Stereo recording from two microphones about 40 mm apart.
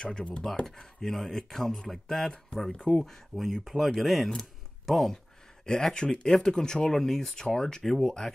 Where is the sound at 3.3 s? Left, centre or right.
Centre.